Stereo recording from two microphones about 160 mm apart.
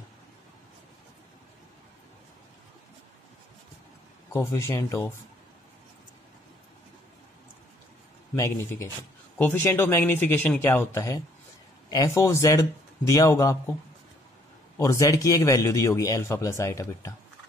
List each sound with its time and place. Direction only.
4.3 s speech: 15° left (ahead or behind)
8.4 s a man's voice: 15° left (ahead or behind)
14.8 s a man's voice: 20° left (ahead or behind)